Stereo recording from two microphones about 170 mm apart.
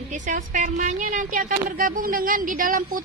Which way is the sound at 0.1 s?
45° right (ahead or behind).